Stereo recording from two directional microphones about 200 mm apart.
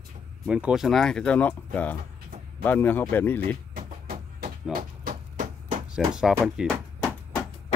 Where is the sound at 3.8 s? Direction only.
50° right (ahead or behind).